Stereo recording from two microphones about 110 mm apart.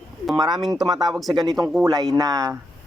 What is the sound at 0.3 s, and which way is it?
Speech, 40° right (ahead or behind).